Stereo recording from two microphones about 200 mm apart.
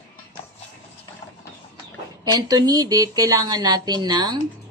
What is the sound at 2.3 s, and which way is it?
A woman's voice, 20° right (ahead or behind).